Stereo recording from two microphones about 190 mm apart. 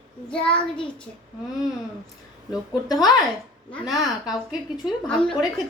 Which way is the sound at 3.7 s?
5° left (ahead or behind).